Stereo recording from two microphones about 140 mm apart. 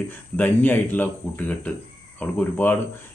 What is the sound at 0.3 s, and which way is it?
A man's voice, 15° left (ahead or behind).